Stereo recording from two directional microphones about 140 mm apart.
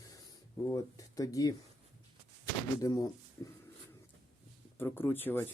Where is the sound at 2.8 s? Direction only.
25° left (ahead or behind).